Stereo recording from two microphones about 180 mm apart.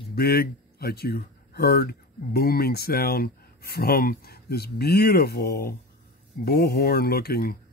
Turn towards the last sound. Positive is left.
turn(degrees=60)  # may be behind; listen again after turning